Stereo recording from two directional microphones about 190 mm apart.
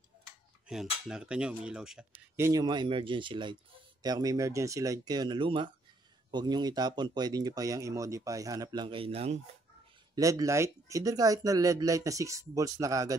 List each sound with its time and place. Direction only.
0.7 s cutlery: 5° right (ahead or behind)
2.3 s speech: 15° right (ahead or behind); by 9.4 s 30° right (ahead or behind)
10.1 s speech: 15° right (ahead or behind)